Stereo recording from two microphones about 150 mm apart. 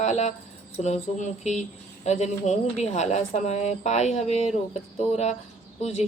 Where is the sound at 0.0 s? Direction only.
50° left (ahead or behind).